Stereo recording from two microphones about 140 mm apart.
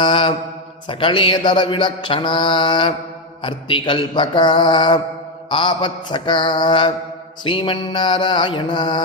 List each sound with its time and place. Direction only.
0.0 s mantra: 35° left (ahead or behind)